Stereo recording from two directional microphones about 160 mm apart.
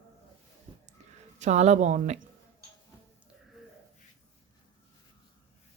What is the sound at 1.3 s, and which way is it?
Speech, 45° right (ahead or behind).